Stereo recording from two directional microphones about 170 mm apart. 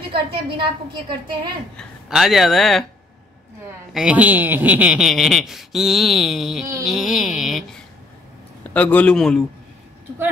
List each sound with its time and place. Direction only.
0.1 s a woman's voice: 30° right (ahead or behind)
1.8 s speech: centre (ahead or behind)
3.9 s speech: 5° right (ahead or behind)
8.7 s a man's voice: 10° left (ahead or behind)